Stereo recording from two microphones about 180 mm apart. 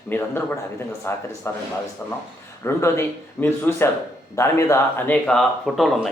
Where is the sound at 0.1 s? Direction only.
15° left (ahead or behind).